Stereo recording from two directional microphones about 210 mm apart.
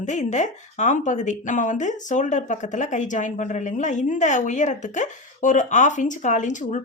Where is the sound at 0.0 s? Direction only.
35° left (ahead or behind).